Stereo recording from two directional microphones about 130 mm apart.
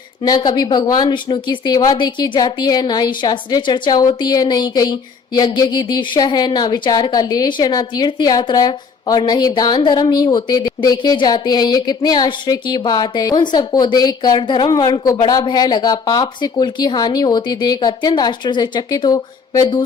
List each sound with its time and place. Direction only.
0.2 s speech: 35° left (ahead or behind)